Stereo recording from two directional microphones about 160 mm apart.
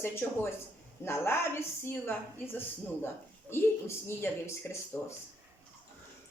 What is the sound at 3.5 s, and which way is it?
Speech, 15° left (ahead or behind).